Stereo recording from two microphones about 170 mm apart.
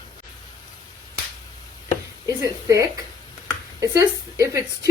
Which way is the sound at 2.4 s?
20° right (ahead or behind).